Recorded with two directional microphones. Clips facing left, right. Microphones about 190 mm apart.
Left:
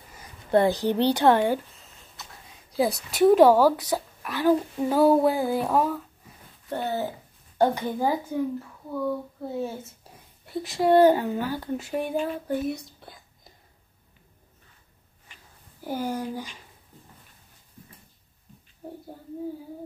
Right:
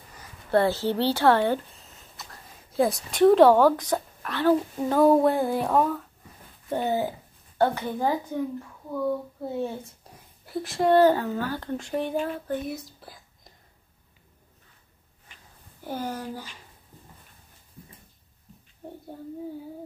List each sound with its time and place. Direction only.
0.5 s speech: 15° left (ahead or behind)
1.7 s speech: centre (ahead or behind)
6.7 s speech: 15° right (ahead or behind)
7.5 s speech: 15° left (ahead or behind)
8.9 s speech: centre (ahead or behind)
10.9 s speech: 10° left (ahead or behind)
12.6 s whispering: centre (ahead or behind)
15.8 s speech: 10° left (ahead or behind)